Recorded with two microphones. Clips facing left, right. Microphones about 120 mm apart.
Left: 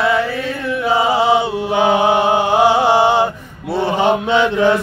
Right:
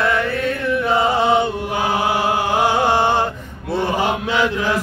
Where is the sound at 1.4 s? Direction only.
20° left (ahead or behind).